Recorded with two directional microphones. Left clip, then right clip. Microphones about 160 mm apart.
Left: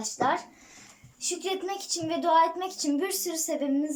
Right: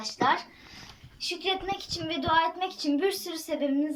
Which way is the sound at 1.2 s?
25° left (ahead or behind).